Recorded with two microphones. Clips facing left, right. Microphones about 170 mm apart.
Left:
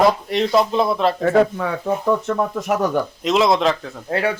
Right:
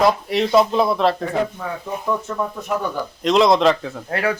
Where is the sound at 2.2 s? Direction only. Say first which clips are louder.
Left 5 dB; 85° left.